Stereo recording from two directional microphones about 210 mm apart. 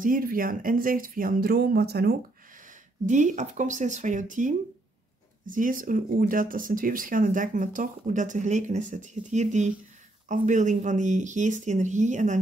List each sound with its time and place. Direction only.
0.0 s speech: 40° right (ahead or behind)
3.1 s speech: 35° right (ahead or behind)